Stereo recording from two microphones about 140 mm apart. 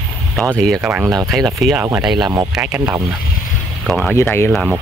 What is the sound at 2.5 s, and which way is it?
Speech, 10° right (ahead or behind).